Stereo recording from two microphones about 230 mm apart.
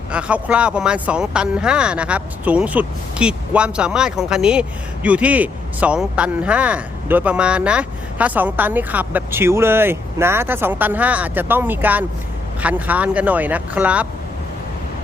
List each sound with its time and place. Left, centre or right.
0.1 s speech: centre